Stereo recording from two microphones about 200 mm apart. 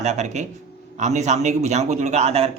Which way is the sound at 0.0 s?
35° right (ahead or behind).